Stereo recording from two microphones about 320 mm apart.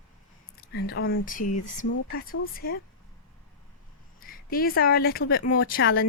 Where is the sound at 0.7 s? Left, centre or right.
Left.